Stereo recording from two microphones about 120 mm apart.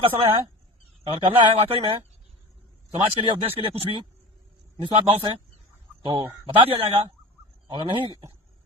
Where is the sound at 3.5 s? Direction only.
50° right (ahead or behind).